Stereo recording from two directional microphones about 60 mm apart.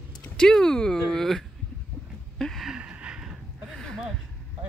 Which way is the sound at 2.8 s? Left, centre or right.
Right.